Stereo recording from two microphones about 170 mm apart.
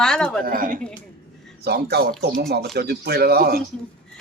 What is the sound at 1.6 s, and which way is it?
Speech, 75° right (ahead or behind).